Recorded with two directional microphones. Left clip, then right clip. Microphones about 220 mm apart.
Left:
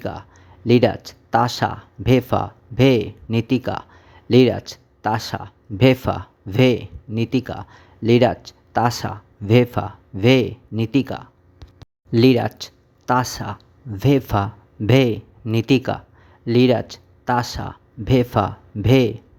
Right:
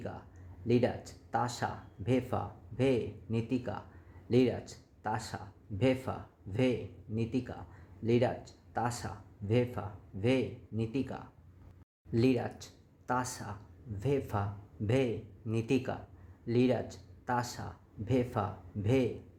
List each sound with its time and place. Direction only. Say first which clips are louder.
0.0 s speech: left 15 dB; 30° left (ahead or behind)